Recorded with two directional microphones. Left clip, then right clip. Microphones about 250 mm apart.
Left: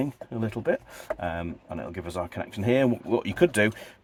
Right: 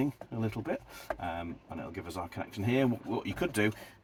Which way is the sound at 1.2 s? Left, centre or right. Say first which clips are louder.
Left 6 dB; left.